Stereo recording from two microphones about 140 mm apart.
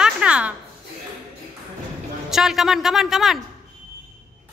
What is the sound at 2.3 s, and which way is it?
A woman's voice, centre (ahead or behind).